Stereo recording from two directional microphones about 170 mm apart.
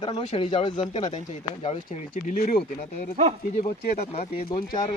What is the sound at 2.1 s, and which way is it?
Speech, 50° left (ahead or behind).